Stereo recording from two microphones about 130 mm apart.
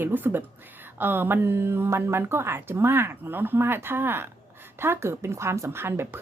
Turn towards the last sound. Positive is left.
turn(degrees=-20)  # may be behind; listen again after turning